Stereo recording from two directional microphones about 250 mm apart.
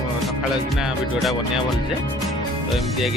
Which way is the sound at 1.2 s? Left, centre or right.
Centre.